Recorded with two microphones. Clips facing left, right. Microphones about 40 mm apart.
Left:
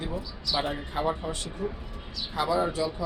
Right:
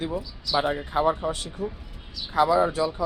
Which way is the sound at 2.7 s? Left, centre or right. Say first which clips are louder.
Right 4 dB; right.